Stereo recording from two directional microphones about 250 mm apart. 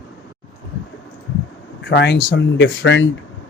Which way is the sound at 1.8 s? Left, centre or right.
Left.